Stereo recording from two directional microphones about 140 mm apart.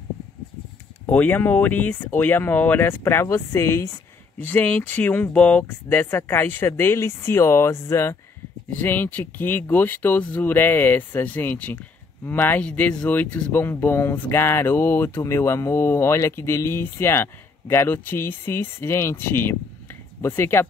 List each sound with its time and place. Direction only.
1.0 s speech: 10° left (ahead or behind)